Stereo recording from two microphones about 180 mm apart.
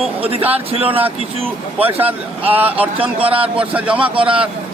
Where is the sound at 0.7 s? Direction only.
30° right (ahead or behind).